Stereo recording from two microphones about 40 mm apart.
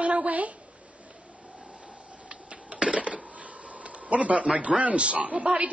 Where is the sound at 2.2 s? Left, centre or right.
Right.